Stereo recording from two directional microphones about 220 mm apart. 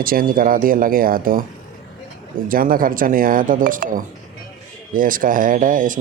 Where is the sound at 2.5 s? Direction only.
40° right (ahead or behind).